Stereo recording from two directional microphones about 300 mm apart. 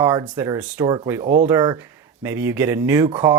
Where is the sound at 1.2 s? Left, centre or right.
Right.